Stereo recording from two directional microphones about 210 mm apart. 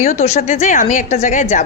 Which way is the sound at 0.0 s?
30° left (ahead or behind).